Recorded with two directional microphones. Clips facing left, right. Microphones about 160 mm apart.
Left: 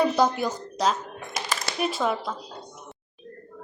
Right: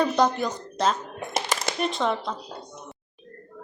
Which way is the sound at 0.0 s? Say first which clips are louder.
Even; 5° left (ahead or behind).